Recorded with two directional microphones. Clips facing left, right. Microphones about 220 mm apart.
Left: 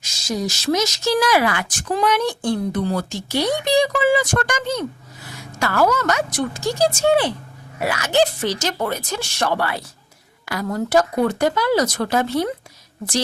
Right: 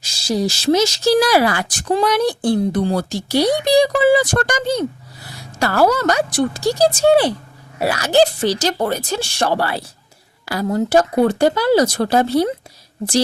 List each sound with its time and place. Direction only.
0.0 s speech: 30° right (ahead or behind)